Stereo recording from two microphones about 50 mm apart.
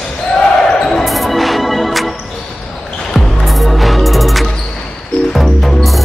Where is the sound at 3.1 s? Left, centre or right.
Centre.